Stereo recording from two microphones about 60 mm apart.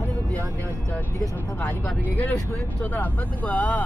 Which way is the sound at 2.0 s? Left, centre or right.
Left.